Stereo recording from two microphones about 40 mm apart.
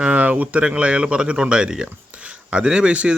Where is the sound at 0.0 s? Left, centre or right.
Right.